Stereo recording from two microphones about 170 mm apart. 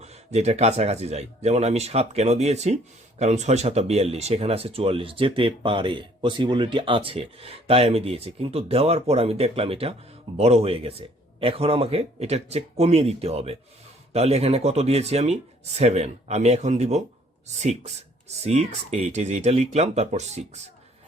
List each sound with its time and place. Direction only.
0.0 s speech: 40° right (ahead or behind)